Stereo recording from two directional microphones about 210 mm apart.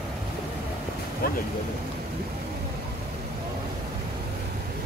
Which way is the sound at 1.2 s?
45° left (ahead or behind).